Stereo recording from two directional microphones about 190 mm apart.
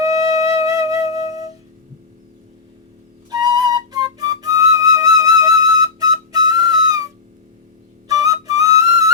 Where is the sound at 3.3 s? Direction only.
20° right (ahead or behind).